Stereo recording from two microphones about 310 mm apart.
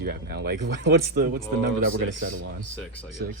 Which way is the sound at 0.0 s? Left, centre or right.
Right.